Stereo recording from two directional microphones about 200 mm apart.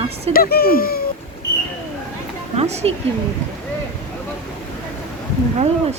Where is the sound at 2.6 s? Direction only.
30° right (ahead or behind).